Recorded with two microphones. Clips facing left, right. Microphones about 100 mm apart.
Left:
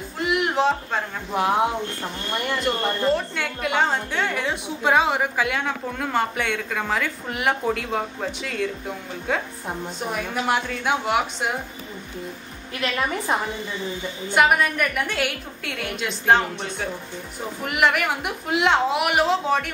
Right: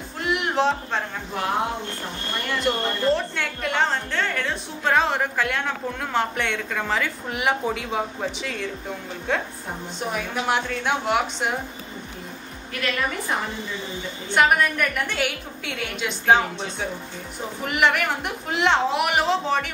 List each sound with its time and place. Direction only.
0.2 s a sound: centre (ahead or behind)
2.6 s a woman's voice: centre (ahead or behind)
13.3 s a woman's voice: 20° left (ahead or behind)
14.3 s a woman's voice: 5° left (ahead or behind)